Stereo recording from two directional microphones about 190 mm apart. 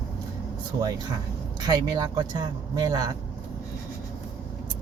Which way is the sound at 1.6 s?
20° right (ahead or behind).